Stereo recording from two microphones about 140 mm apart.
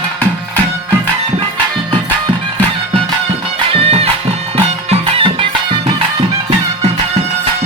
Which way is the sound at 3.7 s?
45° right (ahead or behind).